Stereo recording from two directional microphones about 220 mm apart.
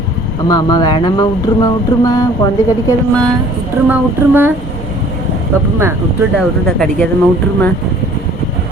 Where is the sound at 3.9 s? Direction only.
10° right (ahead or behind).